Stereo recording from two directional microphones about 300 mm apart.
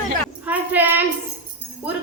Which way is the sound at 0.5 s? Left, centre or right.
Centre.